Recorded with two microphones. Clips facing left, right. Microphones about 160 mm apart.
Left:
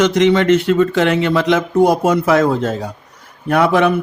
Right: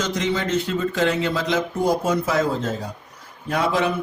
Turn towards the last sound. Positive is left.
turn(degrees=65)  # may be behind; listen again after turning